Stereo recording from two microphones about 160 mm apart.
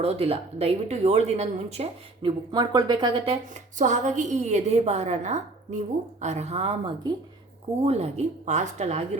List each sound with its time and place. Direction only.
0.0 s speech: 40° right (ahead or behind)
2.5 s speech: 25° right (ahead or behind)
3.5 s a woman's voice: 50° right (ahead or behind)